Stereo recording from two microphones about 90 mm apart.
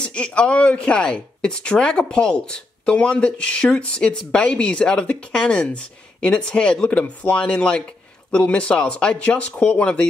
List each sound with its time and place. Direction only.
0.0 s speech: 10° left (ahead or behind)